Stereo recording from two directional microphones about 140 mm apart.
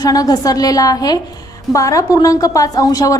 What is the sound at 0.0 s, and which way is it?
A woman's voice, 25° left (ahead or behind).